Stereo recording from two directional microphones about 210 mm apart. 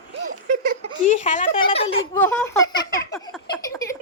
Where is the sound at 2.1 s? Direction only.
10° left (ahead or behind).